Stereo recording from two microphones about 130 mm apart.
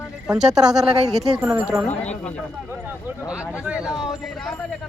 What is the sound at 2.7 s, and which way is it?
Speech, 15° right (ahead or behind).